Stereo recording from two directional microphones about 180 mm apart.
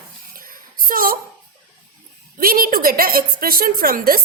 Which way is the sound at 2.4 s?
55° right (ahead or behind).